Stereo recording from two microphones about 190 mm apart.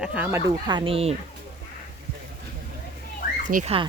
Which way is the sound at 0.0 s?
5° right (ahead or behind).